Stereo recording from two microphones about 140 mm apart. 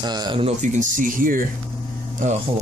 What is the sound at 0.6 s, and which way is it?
Speech, 65° right (ahead or behind).